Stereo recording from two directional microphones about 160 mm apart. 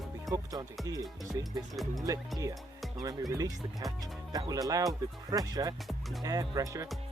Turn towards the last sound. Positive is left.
turn(degrees=-20)  # may be behind; listen again after turning